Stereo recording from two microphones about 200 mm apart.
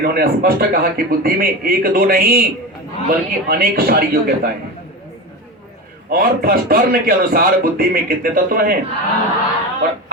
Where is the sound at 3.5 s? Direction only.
45° right (ahead or behind).